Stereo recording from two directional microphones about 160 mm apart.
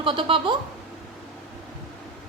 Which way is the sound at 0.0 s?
35° right (ahead or behind).